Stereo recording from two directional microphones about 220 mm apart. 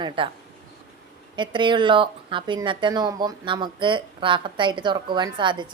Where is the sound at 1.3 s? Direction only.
20° right (ahead or behind).